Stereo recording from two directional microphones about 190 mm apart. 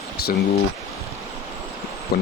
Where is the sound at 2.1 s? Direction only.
55° left (ahead or behind).